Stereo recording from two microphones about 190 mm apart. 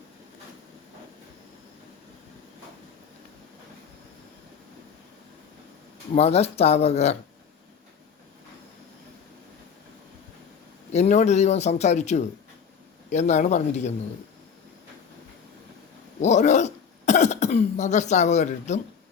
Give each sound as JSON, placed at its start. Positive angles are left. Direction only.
{"t": 6.1, "sound": "speech", "side_deg": 35}
{"t": 10.9, "sound": "speech", "side_deg": 35}
{"t": 16.2, "sound": "speech", "side_deg": 35}